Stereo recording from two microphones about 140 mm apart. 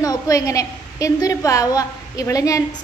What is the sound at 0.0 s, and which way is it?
A woman's voice, 25° left (ahead or behind).